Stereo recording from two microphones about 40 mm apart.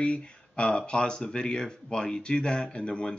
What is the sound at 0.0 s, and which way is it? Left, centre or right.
Speech, left.